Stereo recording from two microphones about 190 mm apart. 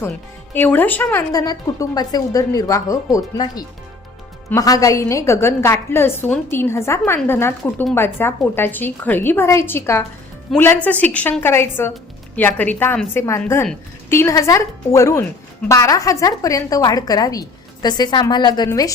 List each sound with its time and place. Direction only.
0.5 s a woman's voice: 10° left (ahead or behind)